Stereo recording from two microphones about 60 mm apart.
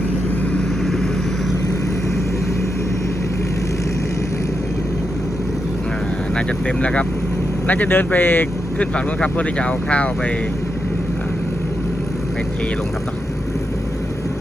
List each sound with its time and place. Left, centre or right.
6.3 s speech: centre
7.7 s speech: left
8.8 s speech: left